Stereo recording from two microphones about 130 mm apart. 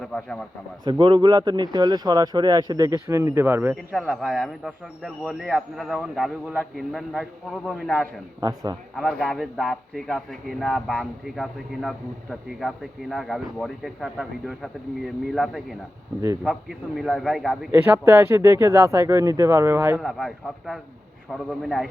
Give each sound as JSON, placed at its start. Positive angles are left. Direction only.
{"t": 0.0, "sound": "speech", "side_deg": 5}
{"t": 0.9, "sound": "speech", "side_deg": -35}
{"t": 3.9, "sound": "a man's voice", "side_deg": 5}
{"t": 8.4, "sound": "speech", "side_deg": -25}
{"t": 9.0, "sound": "a man's voice", "side_deg": 0}
{"t": 17.7, "sound": "speech", "side_deg": -15}
{"t": 20.0, "sound": "a man's voice", "side_deg": 0}